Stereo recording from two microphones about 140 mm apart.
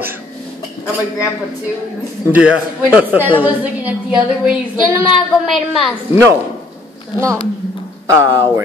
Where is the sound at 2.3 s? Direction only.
10° right (ahead or behind).